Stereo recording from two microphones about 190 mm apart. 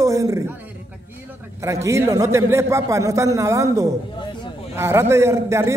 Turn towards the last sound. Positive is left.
turn(degrees=-15)  # may be behind; listen again after turning